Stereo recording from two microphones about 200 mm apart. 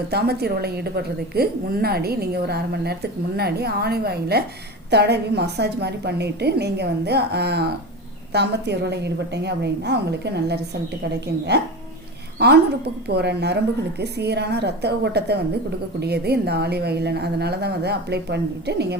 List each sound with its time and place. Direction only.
0.1 s a woman's voice: 50° right (ahead or behind)
12.4 s a woman's voice: 55° right (ahead or behind)